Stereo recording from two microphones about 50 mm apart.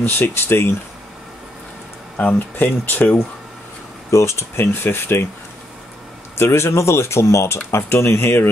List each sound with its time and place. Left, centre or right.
0.0 s speech: left
2.1 s speech: left
4.1 s speech: left
4.8 s speech: left
6.3 s speech: left